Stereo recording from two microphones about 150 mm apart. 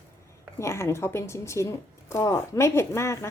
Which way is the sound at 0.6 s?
20° left (ahead or behind).